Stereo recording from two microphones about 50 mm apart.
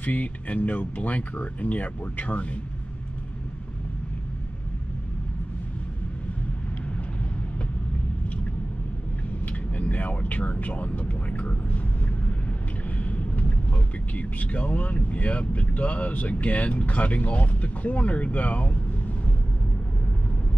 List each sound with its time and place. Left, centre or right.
0.0 s speech: left
9.5 s speech: left
12.9 s a sound: left
14.1 s speech: left